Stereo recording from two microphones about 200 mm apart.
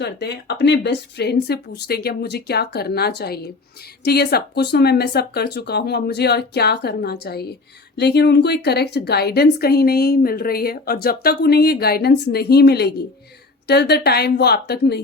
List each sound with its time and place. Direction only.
0.0 s a woman's voice: 55° left (ahead or behind)